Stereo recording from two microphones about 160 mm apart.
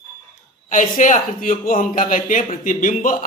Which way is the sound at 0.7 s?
55° left (ahead or behind).